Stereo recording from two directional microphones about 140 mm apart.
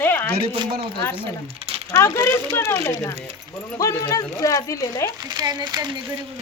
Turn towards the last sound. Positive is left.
turn(degrees=-30)  # may be behind; listen again after turning